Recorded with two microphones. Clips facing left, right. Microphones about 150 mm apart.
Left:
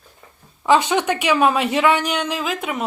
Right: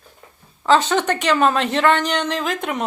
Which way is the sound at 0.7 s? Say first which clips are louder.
Even; 10° left (ahead or behind).